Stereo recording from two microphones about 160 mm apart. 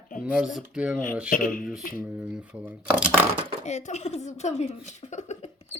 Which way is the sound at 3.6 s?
45° left (ahead or behind).